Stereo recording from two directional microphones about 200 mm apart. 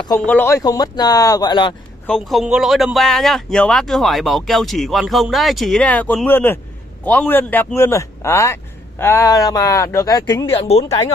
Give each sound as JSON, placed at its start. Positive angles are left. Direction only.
{"t": 0.2, "sound": "speech", "side_deg": 10}
{"t": 2.0, "sound": "a man's voice", "side_deg": 0}